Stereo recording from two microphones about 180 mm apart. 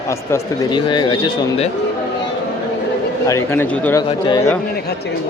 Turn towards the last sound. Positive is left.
turn(degrees=15)  # may be behind; listen again after turning